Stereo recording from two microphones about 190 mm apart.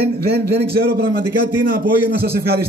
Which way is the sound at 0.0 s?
55° right (ahead or behind).